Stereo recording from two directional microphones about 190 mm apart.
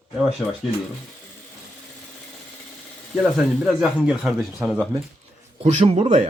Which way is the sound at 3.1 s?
5° right (ahead or behind).